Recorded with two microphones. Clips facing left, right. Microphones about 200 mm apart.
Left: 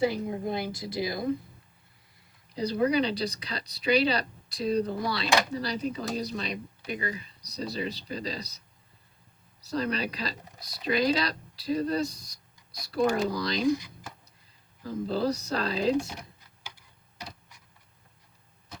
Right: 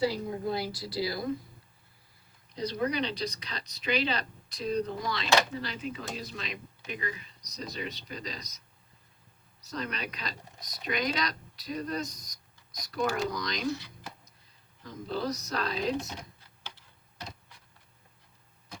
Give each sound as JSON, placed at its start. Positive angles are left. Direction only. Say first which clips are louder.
{"t": 0.0, "sound": "a woman's voice", "louder": "left 2 dB", "side_deg": 20}
{"t": 2.6, "sound": "speech", "louder": "left 5 dB", "side_deg": 30}
{"t": 9.6, "sound": "speech", "louder": "left 7 dB", "side_deg": 35}
{"t": 13.7, "sound": "speech", "louder": "left 8 dB", "side_deg": 15}
{"t": 14.8, "sound": "speech", "louder": "left 5 dB", "side_deg": 30}
{"t": 16.6, "sound": "a sound", "louder": "even", "side_deg": 10}